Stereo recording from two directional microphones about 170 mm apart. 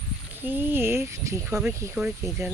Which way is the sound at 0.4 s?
10° right (ahead or behind).